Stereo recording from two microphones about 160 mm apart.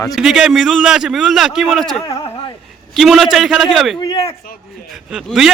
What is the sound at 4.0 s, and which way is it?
Speech, 25° left (ahead or behind).